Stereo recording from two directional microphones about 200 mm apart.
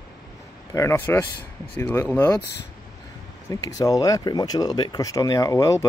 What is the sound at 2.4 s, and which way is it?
Speech, 55° left (ahead or behind).